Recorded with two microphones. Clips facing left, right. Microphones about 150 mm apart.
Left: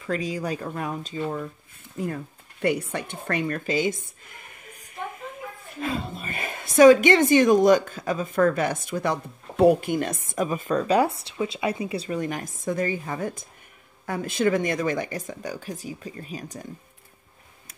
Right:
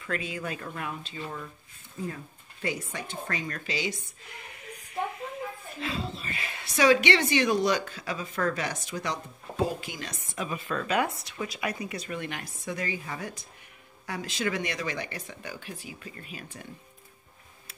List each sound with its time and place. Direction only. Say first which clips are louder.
0.0 s speech: left 6 dB; 35° left (ahead or behind)
2.0 s a woman's voice: left 6 dB; 70° left (ahead or behind); by 4.6 s 50° left (ahead or behind)
5.8 s a woman's voice: left 5 dB; 50° left (ahead or behind)